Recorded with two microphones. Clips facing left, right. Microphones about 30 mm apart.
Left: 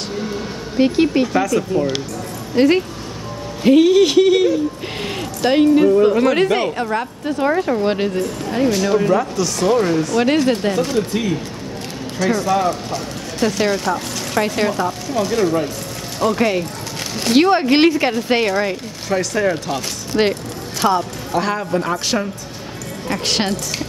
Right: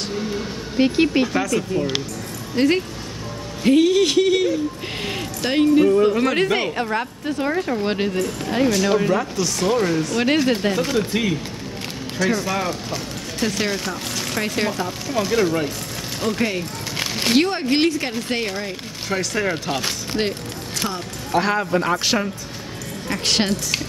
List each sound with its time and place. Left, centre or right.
0.7 s speech: centre
12.2 s speech: centre
16.2 s speech: centre
16.9 s a sound: right
17.4 s speech: centre
19.0 s a man's voice: centre
20.8 s speech: left
21.3 s a man's voice: centre